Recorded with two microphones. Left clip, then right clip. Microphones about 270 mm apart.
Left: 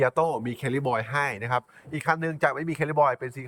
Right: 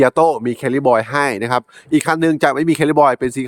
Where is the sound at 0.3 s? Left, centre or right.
Centre.